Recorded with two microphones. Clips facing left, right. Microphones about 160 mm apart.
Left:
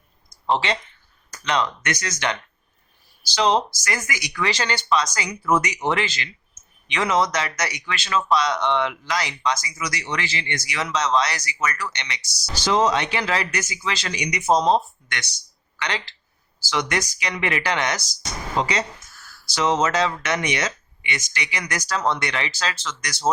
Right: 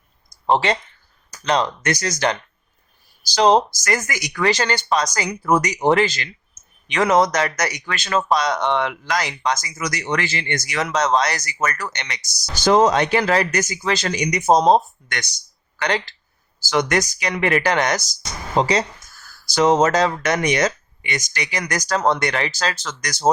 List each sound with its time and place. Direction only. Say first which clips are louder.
0.4 s speech: right 4 dB; 45° right (ahead or behind)
1.5 s speech: right 4 dB; 35° right (ahead or behind)
18.5 s speech: right 5 dB; 35° right (ahead or behind)